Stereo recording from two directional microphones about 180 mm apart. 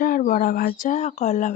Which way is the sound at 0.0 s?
45° left (ahead or behind).